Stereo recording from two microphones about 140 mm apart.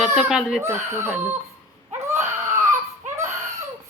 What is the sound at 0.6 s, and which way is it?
Speech, 15° right (ahead or behind).